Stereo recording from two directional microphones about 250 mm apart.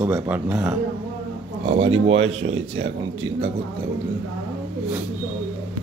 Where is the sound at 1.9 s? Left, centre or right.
Right.